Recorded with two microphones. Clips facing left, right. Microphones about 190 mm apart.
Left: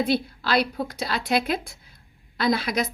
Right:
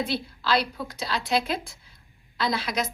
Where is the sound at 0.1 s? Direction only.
55° left (ahead or behind).